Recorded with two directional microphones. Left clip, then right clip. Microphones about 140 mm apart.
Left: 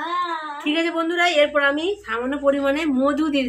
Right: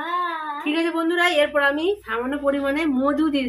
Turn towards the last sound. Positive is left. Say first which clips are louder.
# left 1 dB
turn(degrees=15)  # may be behind; listen again after turning